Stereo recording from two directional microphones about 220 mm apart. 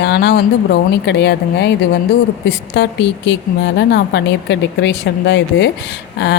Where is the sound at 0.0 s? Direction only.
50° left (ahead or behind).